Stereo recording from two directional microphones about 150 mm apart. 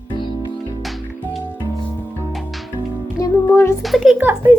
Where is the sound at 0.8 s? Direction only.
Centre (ahead or behind).